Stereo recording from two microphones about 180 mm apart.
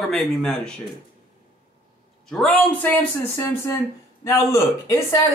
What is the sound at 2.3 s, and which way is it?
Speech, 5° left (ahead or behind).